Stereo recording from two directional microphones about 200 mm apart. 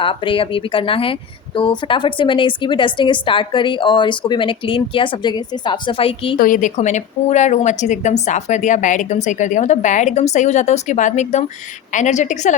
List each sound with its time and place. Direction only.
0.0 s a woman's voice: 25° left (ahead or behind)
6.3 s a woman's voice: 40° left (ahead or behind)